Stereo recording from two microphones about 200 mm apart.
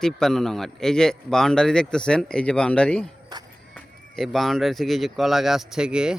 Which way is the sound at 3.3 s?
20° right (ahead or behind).